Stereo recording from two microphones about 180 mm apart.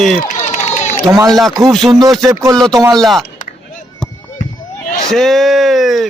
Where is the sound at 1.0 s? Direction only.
20° right (ahead or behind).